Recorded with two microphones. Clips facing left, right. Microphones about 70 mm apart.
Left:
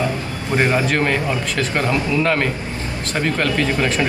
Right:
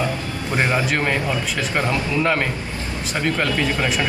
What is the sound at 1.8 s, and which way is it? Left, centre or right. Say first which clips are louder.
Speech: left 2 dB; right.